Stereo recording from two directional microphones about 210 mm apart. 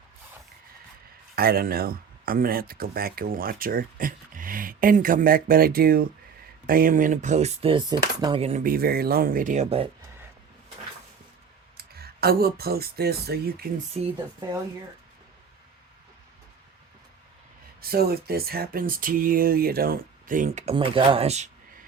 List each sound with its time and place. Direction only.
1.4 s speech: 45° right (ahead or behind); by 8.6 s 30° right (ahead or behind)
8.6 s speech: 45° right (ahead or behind); by 9.9 s 30° right (ahead or behind)
11.8 s speech: 45° right (ahead or behind)
14.0 s speech: 30° right (ahead or behind)
17.7 s speech: 45° right (ahead or behind); by 21.5 s 30° right (ahead or behind)